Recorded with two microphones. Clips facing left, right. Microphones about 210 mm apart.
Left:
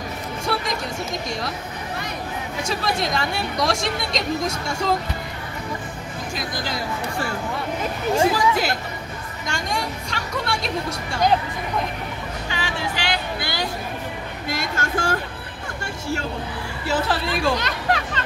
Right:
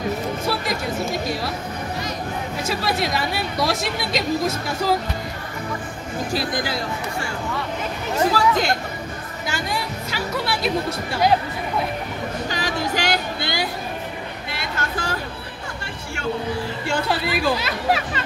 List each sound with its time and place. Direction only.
0.5 s music: centre (ahead or behind)
2.6 s speech: 5° right (ahead or behind)
8.2 s speech: 10° left (ahead or behind)
9.5 s a woman's voice: 5° right (ahead or behind)
12.4 s music: 40° right (ahead or behind)
14.5 s a sound: 45° left (ahead or behind)
16.8 s speech: centre (ahead or behind)